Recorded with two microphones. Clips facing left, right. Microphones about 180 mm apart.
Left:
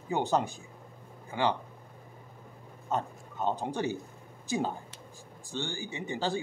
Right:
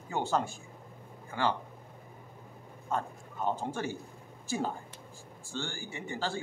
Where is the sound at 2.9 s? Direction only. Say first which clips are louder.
Left 2 dB; 20° left (ahead or behind).